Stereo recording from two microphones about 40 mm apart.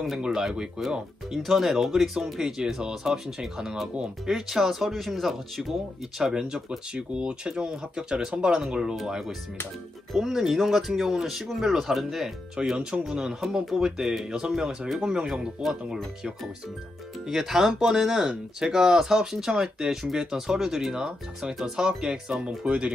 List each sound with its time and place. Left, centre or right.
0.0 s speech: centre
6.1 s speech: centre
12.5 s speech: right
13.0 s speech: centre
17.3 s speech: centre; by 22.9 s right